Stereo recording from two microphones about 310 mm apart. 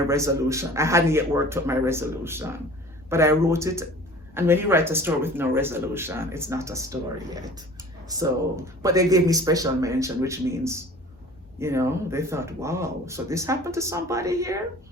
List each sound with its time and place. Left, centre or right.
0.1 s speech: centre